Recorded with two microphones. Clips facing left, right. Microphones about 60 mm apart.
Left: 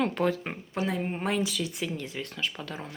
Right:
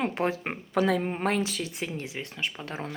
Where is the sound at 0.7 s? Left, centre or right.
Right.